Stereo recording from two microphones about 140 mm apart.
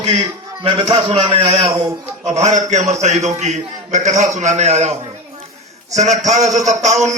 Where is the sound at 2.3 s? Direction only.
55° right (ahead or behind).